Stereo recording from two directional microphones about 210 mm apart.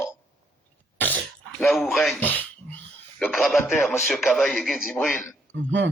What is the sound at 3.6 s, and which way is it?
Speech, 10° left (ahead or behind).